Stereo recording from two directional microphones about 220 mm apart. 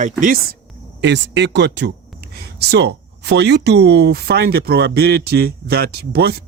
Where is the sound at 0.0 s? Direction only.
35° right (ahead or behind).